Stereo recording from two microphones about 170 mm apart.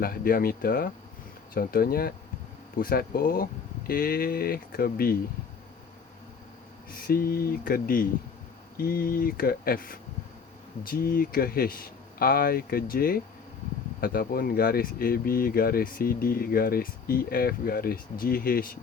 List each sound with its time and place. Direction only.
0.0 s speech: 60° left (ahead or behind)
6.9 s speech: 60° left (ahead or behind)